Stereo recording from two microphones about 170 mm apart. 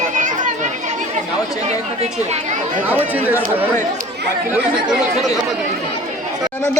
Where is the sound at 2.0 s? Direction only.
40° right (ahead or behind).